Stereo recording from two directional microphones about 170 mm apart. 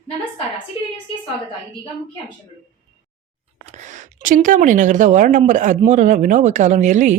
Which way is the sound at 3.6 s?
45° right (ahead or behind).